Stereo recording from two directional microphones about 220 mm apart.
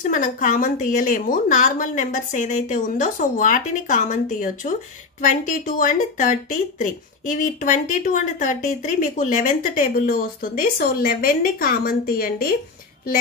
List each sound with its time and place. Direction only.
0.0 s speech: 35° left (ahead or behind)